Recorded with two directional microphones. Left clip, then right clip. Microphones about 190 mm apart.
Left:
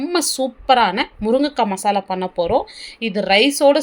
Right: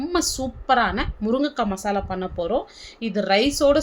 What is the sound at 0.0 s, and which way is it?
Speech, 20° left (ahead or behind).